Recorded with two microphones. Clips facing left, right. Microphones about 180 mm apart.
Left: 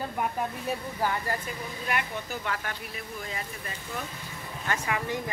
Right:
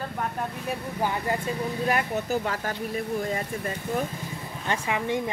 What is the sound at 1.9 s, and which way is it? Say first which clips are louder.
Speech: right 5 dB; 40° right (ahead or behind).